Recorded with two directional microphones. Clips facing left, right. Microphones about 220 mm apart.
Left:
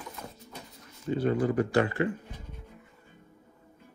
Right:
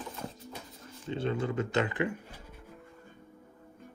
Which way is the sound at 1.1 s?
25° right (ahead or behind).